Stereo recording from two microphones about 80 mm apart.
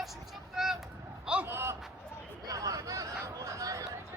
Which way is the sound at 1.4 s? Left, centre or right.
Right.